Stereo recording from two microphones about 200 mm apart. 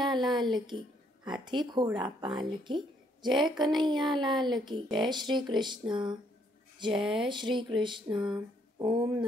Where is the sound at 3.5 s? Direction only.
20° right (ahead or behind).